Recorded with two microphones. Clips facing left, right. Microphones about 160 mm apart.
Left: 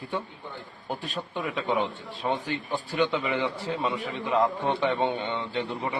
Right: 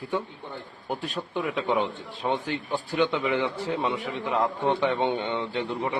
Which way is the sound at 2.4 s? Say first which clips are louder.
Right 1 dB; 10° left (ahead or behind).